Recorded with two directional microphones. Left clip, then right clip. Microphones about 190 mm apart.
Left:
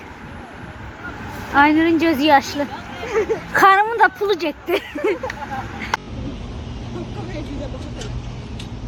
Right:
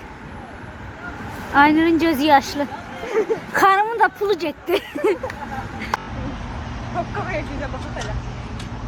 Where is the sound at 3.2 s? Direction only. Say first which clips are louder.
Left 1 dB; 30° left (ahead or behind).